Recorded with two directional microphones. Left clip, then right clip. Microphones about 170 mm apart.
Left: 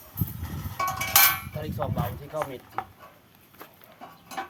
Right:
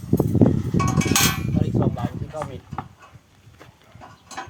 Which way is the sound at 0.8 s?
5° right (ahead or behind).